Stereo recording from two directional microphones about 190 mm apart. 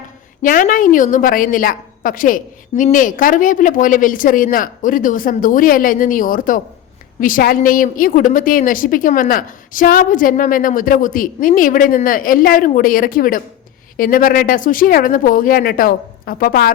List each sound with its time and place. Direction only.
0.4 s a woman's voice: 45° left (ahead or behind)